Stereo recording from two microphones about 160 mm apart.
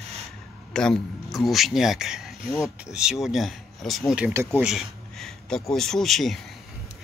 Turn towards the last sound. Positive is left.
turn(degrees=0)  # may be behind; listen again after turning